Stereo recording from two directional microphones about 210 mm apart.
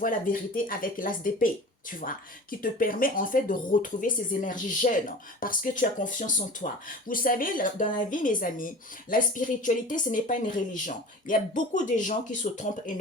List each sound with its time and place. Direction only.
0.0 s a woman's voice: 40° left (ahead or behind)